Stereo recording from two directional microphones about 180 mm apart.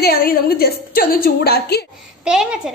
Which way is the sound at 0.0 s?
55° left (ahead or behind).